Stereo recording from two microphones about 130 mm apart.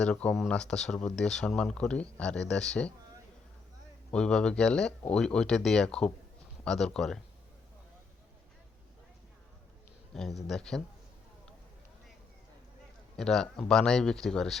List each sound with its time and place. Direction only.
0.0 s speech: 10° left (ahead or behind)
4.1 s speech: 5° left (ahead or behind)
10.2 s speech: 5° left (ahead or behind)
13.1 s speech: 5° left (ahead or behind)